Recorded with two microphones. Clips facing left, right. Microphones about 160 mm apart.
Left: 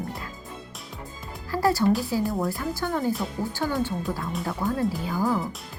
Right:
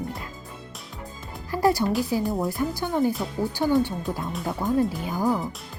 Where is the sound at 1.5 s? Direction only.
20° right (ahead or behind).